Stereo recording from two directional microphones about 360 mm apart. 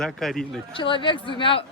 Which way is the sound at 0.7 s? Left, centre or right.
Centre.